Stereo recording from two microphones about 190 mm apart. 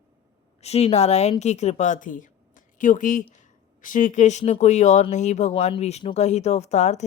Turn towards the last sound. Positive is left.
turn(degrees=35)  # may be behind; listen again after turning